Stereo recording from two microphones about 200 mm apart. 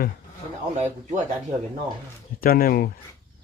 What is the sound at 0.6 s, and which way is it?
Speech, 30° right (ahead or behind).